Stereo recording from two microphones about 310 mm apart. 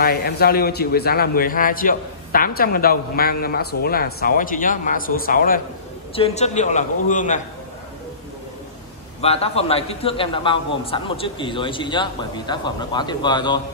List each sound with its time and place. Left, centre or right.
0.0 s a man's voice: left
9.2 s a man's voice: centre